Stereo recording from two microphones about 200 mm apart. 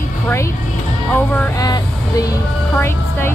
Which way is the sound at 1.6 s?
20° left (ahead or behind).